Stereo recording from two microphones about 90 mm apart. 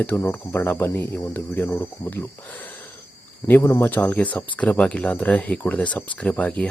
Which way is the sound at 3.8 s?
20° left (ahead or behind).